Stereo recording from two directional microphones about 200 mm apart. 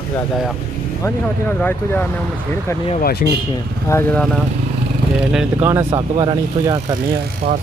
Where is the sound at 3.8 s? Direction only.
15° left (ahead or behind).